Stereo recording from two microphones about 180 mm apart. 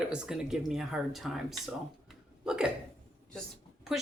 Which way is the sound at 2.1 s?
5° right (ahead or behind).